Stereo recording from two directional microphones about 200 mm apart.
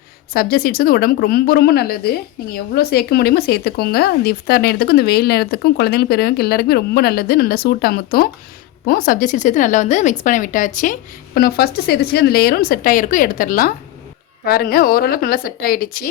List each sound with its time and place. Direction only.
0.3 s a woman's voice: 50° left (ahead or behind)
11.3 s a woman's voice: 50° left (ahead or behind)